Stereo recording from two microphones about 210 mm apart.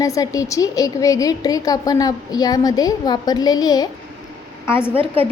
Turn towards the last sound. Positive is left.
turn(degrees=10)  # may be behind; listen again after turning